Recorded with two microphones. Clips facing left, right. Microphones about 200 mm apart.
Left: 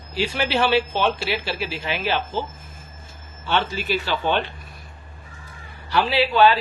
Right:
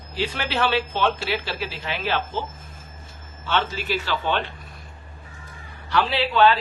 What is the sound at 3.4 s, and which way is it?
Speech, 15° left (ahead or behind).